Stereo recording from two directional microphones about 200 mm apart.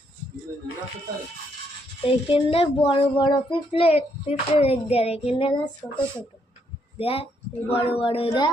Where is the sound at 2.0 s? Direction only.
30° left (ahead or behind).